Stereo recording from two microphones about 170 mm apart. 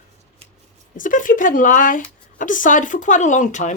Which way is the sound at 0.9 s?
50° left (ahead or behind).